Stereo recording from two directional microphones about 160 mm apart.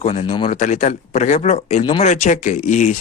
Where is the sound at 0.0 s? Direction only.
40° left (ahead or behind).